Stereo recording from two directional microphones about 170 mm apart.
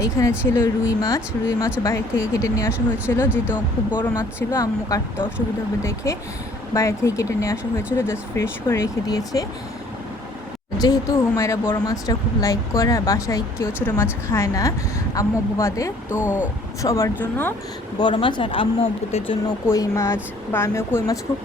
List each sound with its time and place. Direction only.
0.0 s speech: 15° left (ahead or behind)
6.7 s speech: 15° left (ahead or behind)
10.8 s speech: 20° left (ahead or behind)
16.2 s speech: 10° right (ahead or behind)
16.8 s speech: 20° left (ahead or behind)
18.0 s speech: 30° left (ahead or behind)
19.5 s speech: 20° left (ahead or behind)